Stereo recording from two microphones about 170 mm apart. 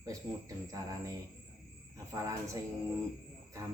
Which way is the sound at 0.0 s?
20° right (ahead or behind).